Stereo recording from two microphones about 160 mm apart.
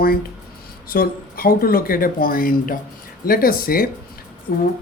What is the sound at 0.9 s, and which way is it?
Speech, 65° left (ahead or behind).